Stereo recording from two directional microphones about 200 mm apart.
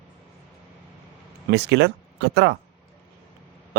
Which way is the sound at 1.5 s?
60° right (ahead or behind).